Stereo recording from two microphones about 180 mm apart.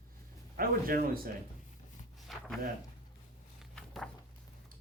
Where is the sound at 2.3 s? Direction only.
Centre (ahead or behind).